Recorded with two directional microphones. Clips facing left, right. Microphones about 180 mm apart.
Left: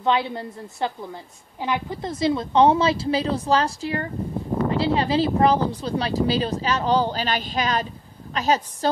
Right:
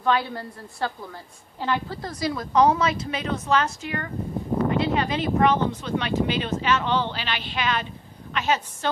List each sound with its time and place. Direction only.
0.0 s a woman's voice: 20° left (ahead or behind); by 8.6 s 35° left (ahead or behind)